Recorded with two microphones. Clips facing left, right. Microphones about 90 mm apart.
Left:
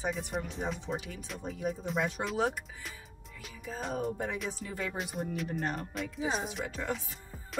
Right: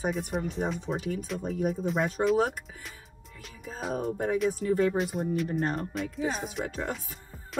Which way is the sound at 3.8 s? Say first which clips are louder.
Right 3 dB; 5° right (ahead or behind).